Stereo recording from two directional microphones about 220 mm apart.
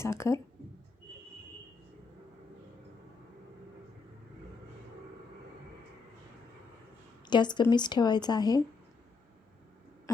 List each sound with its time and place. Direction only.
0.0 s speech: 10° left (ahead or behind)
7.3 s a woman's voice: 20° left (ahead or behind)